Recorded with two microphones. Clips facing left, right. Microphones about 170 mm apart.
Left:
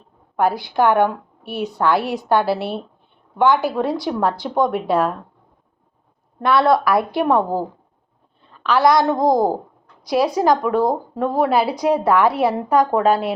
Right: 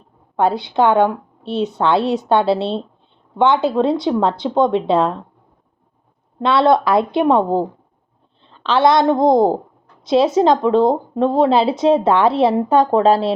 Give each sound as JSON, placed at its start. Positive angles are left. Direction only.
{"t": 0.3, "sound": "speech", "side_deg": -25}
{"t": 6.4, "sound": "a woman's voice", "side_deg": -25}